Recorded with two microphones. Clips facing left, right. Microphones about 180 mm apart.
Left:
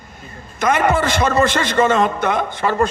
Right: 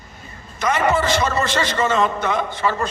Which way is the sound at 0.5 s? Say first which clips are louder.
Left 2 dB; 50° left (ahead or behind).